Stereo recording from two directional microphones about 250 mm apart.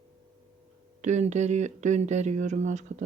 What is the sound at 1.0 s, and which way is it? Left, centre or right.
Speech, right.